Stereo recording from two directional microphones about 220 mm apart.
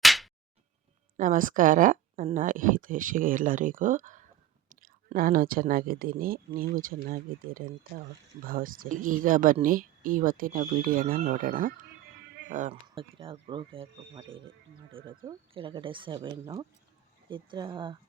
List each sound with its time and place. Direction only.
0.0 s music: centre (ahead or behind)
1.1 s speech: 35° right (ahead or behind)
12.9 s speech: 25° right (ahead or behind)